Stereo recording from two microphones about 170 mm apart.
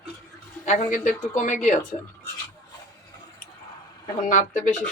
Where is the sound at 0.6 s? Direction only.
45° left (ahead or behind).